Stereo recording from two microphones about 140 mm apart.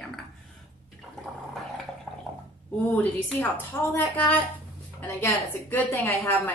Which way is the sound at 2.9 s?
10° left (ahead or behind).